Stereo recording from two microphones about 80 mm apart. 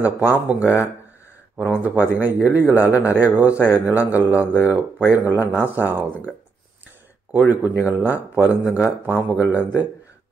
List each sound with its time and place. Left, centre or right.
0.0 s speech: right
0.5 s speech: centre
7.3 s speech: right